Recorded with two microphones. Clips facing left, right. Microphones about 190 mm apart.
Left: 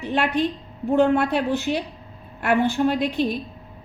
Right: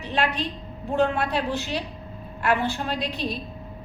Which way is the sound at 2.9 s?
50° left (ahead or behind).